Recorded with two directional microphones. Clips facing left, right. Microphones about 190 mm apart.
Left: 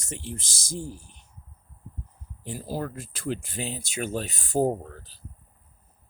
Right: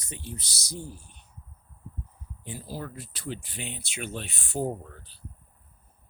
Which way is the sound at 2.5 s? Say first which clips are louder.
Left 6 dB; 45° left (ahead or behind).